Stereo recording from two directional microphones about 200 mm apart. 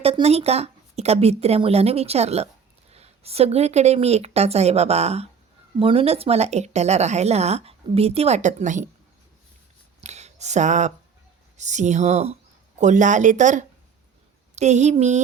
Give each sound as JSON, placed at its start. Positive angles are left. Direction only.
{"t": 0.0, "sound": "speech", "side_deg": -30}
{"t": 10.0, "sound": "a sound", "side_deg": -35}
{"t": 11.5, "sound": "speech", "side_deg": -35}